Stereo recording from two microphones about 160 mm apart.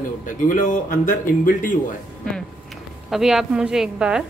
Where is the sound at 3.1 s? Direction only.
5° right (ahead or behind).